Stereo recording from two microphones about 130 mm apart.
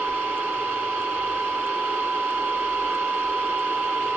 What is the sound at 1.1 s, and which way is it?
Mechanisms, 10° right (ahead or behind).